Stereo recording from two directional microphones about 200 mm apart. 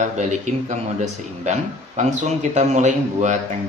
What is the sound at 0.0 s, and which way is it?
Speech, 35° right (ahead or behind).